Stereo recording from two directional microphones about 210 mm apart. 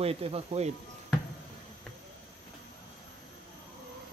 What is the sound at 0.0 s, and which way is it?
Speech, 30° right (ahead or behind).